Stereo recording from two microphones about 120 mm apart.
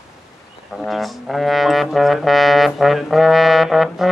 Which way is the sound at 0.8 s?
Centre (ahead or behind).